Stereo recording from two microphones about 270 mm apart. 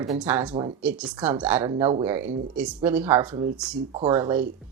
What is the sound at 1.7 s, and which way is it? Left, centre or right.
Speech, centre.